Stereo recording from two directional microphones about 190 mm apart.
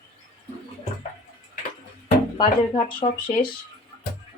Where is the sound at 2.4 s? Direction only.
25° left (ahead or behind).